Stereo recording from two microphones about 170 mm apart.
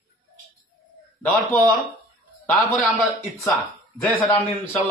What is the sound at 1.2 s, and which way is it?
Speech, 10° left (ahead or behind).